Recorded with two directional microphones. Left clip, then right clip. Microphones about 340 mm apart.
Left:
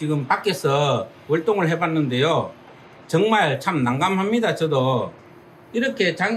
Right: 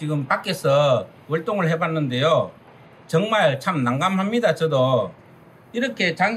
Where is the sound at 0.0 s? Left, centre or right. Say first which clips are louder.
Left 2 dB; centre.